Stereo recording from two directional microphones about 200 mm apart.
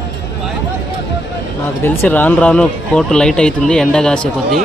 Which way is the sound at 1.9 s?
10° left (ahead or behind).